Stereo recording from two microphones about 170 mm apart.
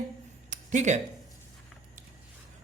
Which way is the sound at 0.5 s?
45° right (ahead or behind).